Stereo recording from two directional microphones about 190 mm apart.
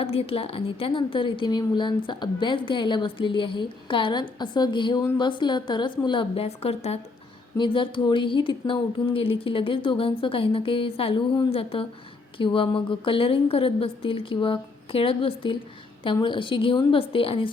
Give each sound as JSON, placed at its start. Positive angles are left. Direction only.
{"t": 0.0, "sound": "a woman's voice", "side_deg": 30}